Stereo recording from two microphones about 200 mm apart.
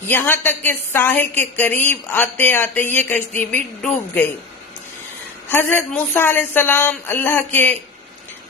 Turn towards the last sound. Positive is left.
turn(degrees=10)  # may be behind; listen again after turning